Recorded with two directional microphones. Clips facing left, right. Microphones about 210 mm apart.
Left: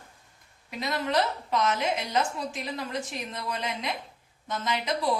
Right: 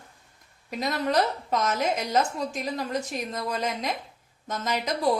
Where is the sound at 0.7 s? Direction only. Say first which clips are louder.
Right 3 dB; 45° right (ahead or behind).